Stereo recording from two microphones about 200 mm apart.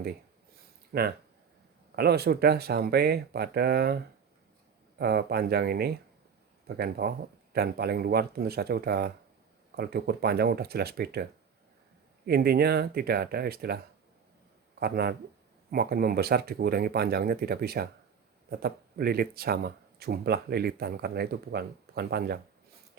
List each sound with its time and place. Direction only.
0.9 s speech: 50° right (ahead or behind)
4.9 s speech: 55° right (ahead or behind)
14.8 s speech: 50° right (ahead or behind)